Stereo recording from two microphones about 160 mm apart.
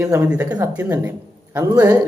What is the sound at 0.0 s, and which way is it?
Speech, 20° right (ahead or behind).